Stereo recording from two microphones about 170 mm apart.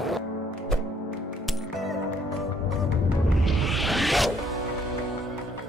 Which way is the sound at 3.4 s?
Centre (ahead or behind).